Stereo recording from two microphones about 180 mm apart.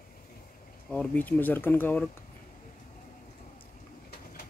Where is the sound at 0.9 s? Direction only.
10° left (ahead or behind).